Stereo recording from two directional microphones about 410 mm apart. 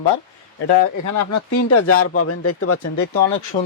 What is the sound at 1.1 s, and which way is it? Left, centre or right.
Speech, left.